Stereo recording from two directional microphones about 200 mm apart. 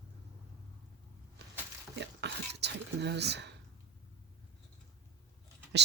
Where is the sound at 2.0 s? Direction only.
55° right (ahead or behind).